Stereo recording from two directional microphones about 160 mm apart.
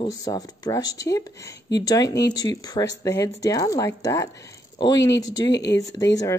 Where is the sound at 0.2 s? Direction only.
25° left (ahead or behind).